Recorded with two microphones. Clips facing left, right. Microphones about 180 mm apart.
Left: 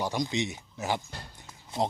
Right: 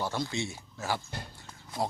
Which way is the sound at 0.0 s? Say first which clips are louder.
Left 3 dB; 15° left (ahead or behind).